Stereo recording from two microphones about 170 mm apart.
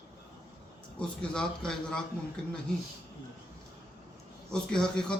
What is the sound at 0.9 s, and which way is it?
Speech, 5° left (ahead or behind).